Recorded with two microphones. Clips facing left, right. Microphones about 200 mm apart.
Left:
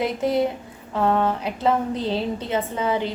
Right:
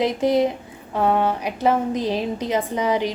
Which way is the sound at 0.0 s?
20° right (ahead or behind).